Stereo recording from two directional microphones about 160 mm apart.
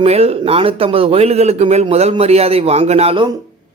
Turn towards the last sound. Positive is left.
turn(degrees=-30)  # may be behind; listen again after turning